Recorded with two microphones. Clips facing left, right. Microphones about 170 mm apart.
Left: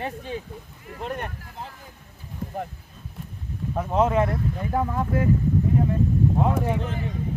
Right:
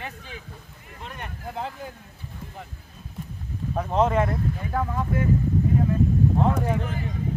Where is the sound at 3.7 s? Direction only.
5° left (ahead or behind).